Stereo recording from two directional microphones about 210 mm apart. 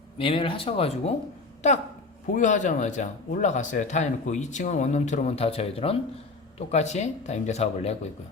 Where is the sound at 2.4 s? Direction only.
35° left (ahead or behind).